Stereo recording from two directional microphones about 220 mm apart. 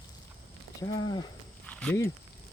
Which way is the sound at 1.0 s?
20° left (ahead or behind).